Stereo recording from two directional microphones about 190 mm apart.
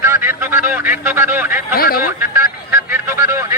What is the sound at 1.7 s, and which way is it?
Speech, 50° left (ahead or behind).